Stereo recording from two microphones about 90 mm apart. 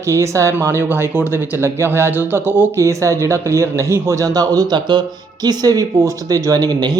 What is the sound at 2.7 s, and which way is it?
Speech, 35° right (ahead or behind).